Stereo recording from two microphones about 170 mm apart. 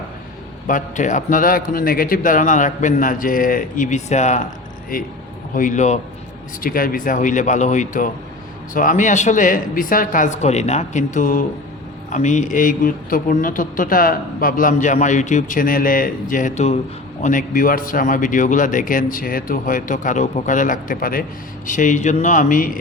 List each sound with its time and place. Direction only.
0.7 s a man's voice: 45° left (ahead or behind)
5.5 s a man's voice: 50° left (ahead or behind)
6.6 s a man's voice: 55° left (ahead or behind)